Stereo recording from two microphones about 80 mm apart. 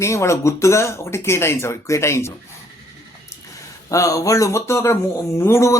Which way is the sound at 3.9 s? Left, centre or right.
Left.